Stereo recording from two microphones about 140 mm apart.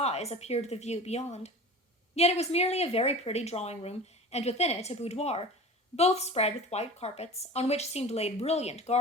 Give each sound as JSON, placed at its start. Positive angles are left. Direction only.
{"t": 0.0, "sound": "a woman's voice", "side_deg": 50}